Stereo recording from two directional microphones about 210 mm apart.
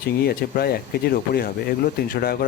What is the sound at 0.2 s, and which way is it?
Speech, 45° left (ahead or behind).